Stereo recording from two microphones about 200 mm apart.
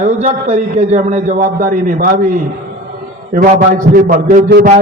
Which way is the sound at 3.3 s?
45° right (ahead or behind).